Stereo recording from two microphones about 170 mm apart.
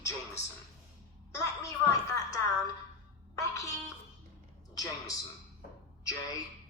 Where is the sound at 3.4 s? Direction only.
20° left (ahead or behind).